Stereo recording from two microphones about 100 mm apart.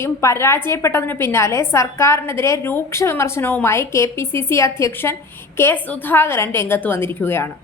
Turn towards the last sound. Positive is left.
turn(degrees=25)  # may be behind; listen again after turning